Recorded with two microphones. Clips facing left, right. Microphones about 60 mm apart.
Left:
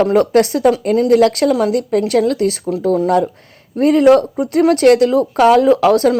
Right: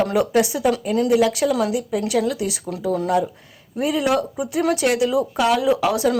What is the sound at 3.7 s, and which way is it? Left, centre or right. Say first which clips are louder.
Speech: left 10 dB; left.